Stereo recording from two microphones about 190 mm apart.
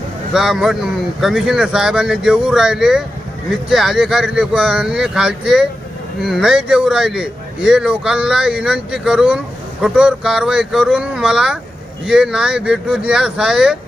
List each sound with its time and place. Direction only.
0.3 s a man's voice: centre (ahead or behind)